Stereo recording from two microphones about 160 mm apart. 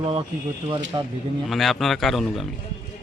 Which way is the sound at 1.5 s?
Centre (ahead or behind).